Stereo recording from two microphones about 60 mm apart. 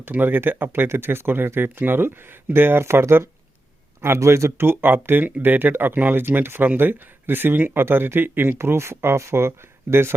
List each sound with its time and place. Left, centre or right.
0.0 s speech: right
8.5 s speech: right